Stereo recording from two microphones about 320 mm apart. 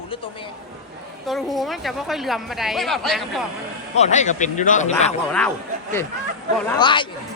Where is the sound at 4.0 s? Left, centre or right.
Left.